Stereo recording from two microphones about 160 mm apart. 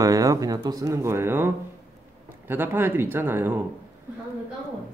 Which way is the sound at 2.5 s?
15° right (ahead or behind).